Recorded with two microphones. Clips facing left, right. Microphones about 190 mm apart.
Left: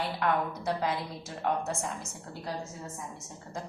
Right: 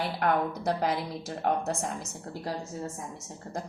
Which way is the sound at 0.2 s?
40° right (ahead or behind).